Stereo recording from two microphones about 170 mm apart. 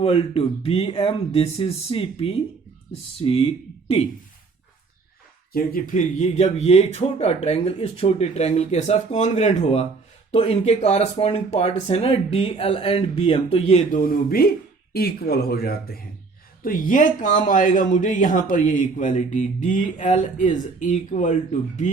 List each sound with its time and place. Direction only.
0.0 s speech: 35° left (ahead or behind)
5.5 s speech: 55° left (ahead or behind); by 14.0 s 40° left (ahead or behind)
14.0 s speech: 60° left (ahead or behind)